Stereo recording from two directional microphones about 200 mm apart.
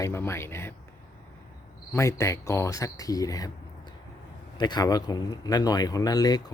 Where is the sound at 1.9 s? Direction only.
15° left (ahead or behind).